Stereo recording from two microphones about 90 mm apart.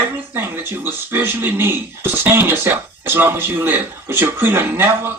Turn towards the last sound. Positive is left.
turn(degrees=-25)  # may be behind; listen again after turning